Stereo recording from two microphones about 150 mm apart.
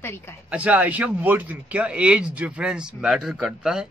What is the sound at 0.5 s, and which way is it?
Speech, 10° right (ahead or behind).